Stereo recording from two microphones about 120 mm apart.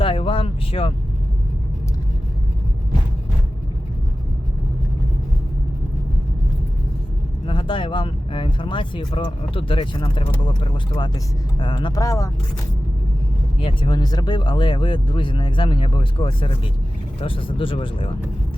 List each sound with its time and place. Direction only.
0.0 s speech: 50° left (ahead or behind)
7.4 s speech: 45° left (ahead or behind); by 12.3 s 25° left (ahead or behind)
13.6 s speech: 45° left (ahead or behind)